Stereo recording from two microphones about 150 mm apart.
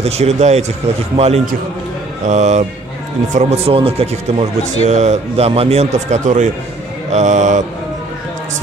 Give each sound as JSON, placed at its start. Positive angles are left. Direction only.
{"t": 0.0, "sound": "speech", "side_deg": -45}